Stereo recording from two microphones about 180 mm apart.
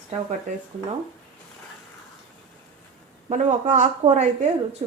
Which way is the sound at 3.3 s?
40° right (ahead or behind).